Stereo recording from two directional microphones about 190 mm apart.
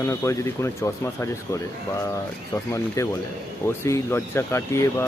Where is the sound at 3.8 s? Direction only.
15° left (ahead or behind).